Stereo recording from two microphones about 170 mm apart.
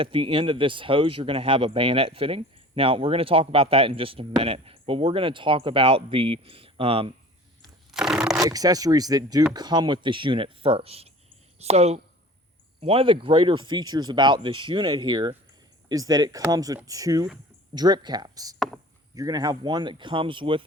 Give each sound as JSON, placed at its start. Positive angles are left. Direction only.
{"t": 0.0, "sound": "speech", "side_deg": -30}
{"t": 7.9, "sound": "a sound", "side_deg": -5}
{"t": 8.4, "sound": "speech", "side_deg": -20}